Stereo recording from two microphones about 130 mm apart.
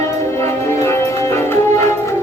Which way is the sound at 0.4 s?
20° left (ahead or behind).